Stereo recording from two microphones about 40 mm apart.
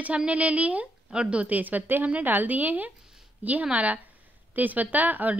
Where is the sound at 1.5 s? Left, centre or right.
Right.